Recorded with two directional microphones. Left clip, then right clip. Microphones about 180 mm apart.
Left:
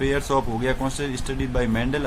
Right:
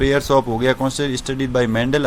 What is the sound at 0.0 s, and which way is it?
Speech, 35° right (ahead or behind).